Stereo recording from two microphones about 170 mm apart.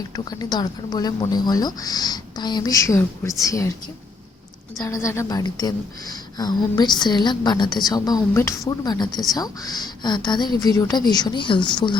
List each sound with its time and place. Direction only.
0.3 s a woman's voice: 25° left (ahead or behind)
4.8 s a woman's voice: 15° left (ahead or behind)